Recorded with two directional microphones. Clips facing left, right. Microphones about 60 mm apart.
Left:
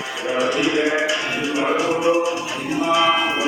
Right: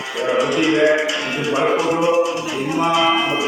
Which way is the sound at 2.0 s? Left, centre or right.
Left.